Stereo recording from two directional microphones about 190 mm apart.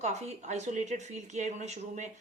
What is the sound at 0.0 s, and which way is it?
A woman's voice, 35° right (ahead or behind).